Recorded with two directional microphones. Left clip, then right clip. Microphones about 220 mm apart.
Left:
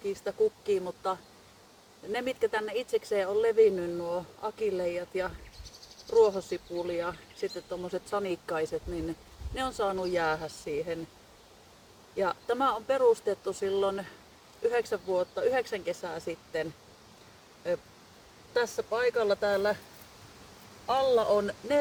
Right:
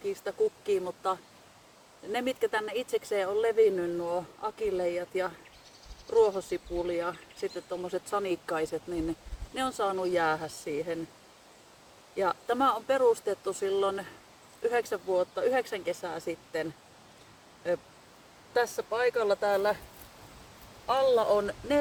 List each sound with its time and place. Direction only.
0.1 s speech: 15° right (ahead or behind)
12.1 s speech: 15° right (ahead or behind)
18.5 s speech: 15° right (ahead or behind)
20.8 s speech: 10° right (ahead or behind)